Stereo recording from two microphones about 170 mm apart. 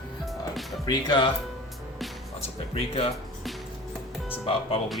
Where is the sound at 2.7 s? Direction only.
35° left (ahead or behind).